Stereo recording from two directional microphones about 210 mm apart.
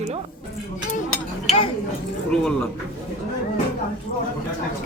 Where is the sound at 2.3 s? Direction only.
5° left (ahead or behind).